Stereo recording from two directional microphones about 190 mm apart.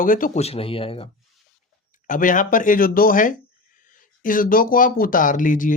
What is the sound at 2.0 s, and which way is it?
Speech, 45° left (ahead or behind).